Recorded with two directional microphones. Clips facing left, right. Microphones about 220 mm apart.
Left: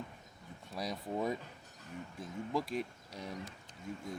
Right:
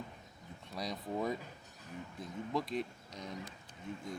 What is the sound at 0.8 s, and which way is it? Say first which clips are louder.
Speech: left 1 dB; 5° left (ahead or behind).